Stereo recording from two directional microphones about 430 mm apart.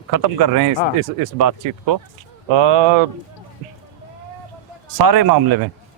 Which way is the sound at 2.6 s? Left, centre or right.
Right.